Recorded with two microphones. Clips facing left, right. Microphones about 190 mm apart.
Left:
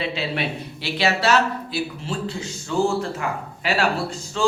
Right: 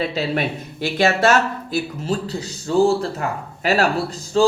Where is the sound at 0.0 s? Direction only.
45° right (ahead or behind).